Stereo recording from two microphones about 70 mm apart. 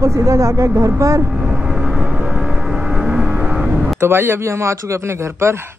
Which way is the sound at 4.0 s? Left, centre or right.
Right.